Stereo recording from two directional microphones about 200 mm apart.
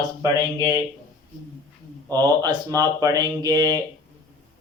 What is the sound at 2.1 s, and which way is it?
Speech, 20° right (ahead or behind).